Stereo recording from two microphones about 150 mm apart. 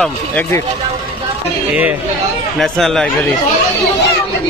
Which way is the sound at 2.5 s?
Centre (ahead or behind).